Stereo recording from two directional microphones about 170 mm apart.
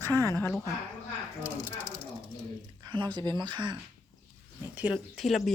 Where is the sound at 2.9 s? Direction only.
25° right (ahead or behind).